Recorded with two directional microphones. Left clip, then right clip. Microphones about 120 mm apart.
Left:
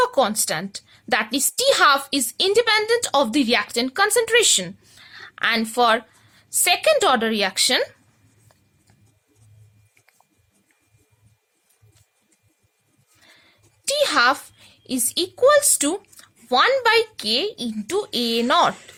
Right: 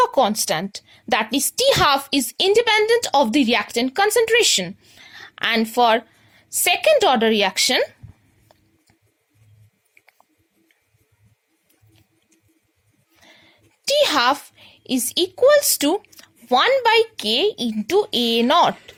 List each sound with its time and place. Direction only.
0.0 s a woman's voice: 20° right (ahead or behind)
13.1 s a sound: 25° right (ahead or behind)
16.8 s a woman's voice: 30° right (ahead or behind)